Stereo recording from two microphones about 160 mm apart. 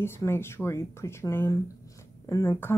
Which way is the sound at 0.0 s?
15° left (ahead or behind).